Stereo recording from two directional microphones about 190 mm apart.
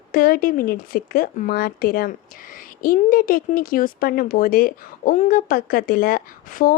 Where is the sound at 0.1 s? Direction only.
50° left (ahead or behind).